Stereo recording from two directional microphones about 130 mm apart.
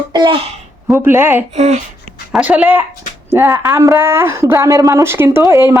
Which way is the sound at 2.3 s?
10° right (ahead or behind).